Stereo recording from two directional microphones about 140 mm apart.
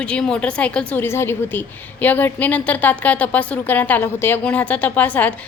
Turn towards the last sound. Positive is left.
turn(degrees=10)  # may be behind; listen again after turning